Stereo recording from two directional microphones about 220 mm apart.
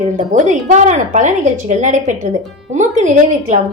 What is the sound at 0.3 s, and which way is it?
Speech, 30° right (ahead or behind).